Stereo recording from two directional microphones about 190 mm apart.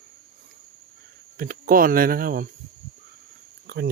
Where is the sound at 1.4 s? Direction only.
50° right (ahead or behind).